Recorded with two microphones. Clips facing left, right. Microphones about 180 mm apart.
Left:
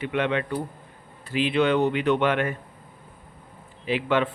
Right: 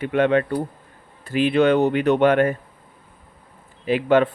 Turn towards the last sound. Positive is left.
turn(degrees=-45)  # may be behind; listen again after turning